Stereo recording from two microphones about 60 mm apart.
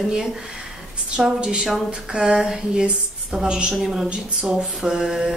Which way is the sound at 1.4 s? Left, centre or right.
Centre.